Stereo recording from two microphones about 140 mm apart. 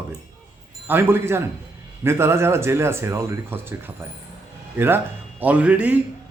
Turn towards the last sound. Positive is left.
turn(degrees=-10)  # may be behind; listen again after turning